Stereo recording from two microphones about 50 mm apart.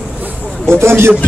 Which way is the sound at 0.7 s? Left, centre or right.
Right.